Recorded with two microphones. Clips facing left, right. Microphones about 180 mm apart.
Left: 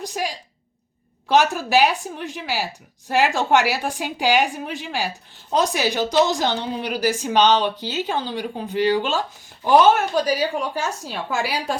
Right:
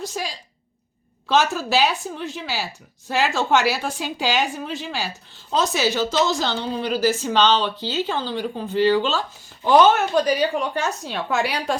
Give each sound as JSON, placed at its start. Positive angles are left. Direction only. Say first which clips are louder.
{"t": 0.0, "sound": "a woman's voice", "louder": "left 2 dB", "side_deg": 15}
{"t": 1.5, "sound": "a woman's voice", "louder": "left 2 dB", "side_deg": 15}